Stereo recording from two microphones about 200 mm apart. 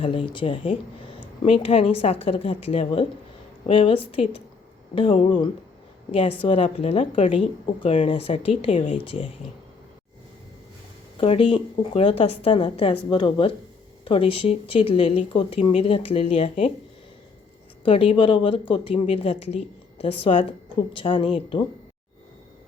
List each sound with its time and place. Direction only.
0.3 s a woman's voice: 25° left (ahead or behind)
11.2 s a woman's voice: 25° left (ahead or behind)
17.8 s a woman's voice: 30° left (ahead or behind)